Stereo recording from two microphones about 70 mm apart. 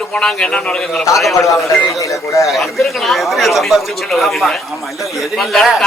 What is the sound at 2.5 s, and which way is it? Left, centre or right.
A man's voice, centre.